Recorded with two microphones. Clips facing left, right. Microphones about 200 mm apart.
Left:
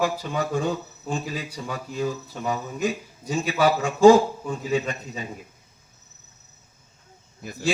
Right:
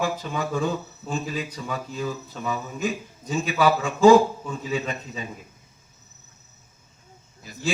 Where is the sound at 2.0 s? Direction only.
40° left (ahead or behind).